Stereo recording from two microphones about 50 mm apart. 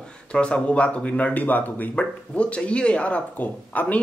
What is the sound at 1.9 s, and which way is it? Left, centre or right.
Speech, left.